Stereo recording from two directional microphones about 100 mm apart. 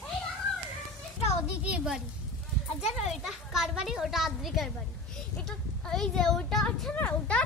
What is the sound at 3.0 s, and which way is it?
Children playing, 5° right (ahead or behind).